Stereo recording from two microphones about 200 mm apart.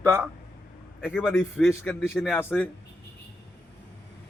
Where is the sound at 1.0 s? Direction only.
5° right (ahead or behind).